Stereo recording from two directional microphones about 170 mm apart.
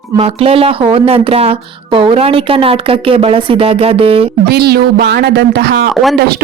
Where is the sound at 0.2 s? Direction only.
35° right (ahead or behind).